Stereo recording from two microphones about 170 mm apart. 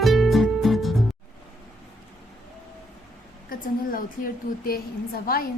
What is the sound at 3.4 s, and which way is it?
A woman's voice, 55° left (ahead or behind).